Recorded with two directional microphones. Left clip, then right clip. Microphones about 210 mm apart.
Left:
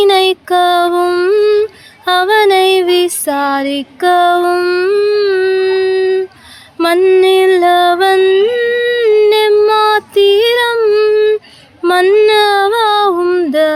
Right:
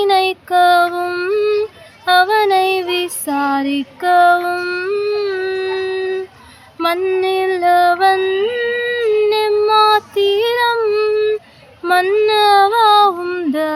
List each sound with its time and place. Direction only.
0.0 s music: 45° left (ahead or behind)
2.0 s female singing: 45° left (ahead or behind)
11.8 s a sound: 40° left (ahead or behind)